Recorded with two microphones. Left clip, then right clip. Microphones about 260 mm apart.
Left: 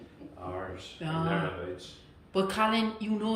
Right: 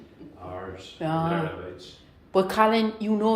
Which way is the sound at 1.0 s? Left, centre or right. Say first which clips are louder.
Right 5 dB; centre.